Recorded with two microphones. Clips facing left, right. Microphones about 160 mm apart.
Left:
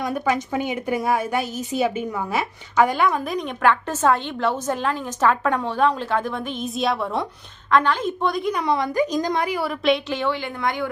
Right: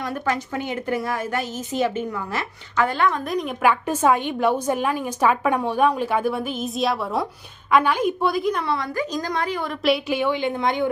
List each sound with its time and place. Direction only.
0.0 s a woman's voice: 15° left (ahead or behind)
3.2 s a woman's voice: centre (ahead or behind)
8.6 s a woman's voice: 15° left (ahead or behind)
9.8 s a woman's voice: 5° right (ahead or behind); by 10.8 s 20° right (ahead or behind)